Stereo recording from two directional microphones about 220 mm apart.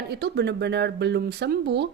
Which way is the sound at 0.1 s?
50° right (ahead or behind).